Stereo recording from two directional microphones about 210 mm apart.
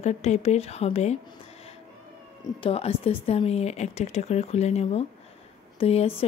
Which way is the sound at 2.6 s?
30° left (ahead or behind).